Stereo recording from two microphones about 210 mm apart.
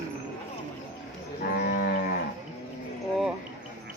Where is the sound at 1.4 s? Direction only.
45° left (ahead or behind).